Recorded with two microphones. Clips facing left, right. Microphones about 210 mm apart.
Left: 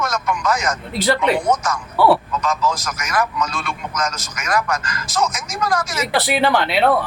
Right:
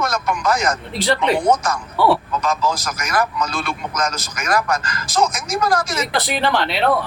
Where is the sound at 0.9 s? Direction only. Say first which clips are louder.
Left 3 dB; 5° left (ahead or behind).